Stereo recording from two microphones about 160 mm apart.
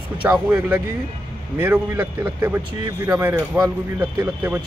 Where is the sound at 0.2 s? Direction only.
10° right (ahead or behind).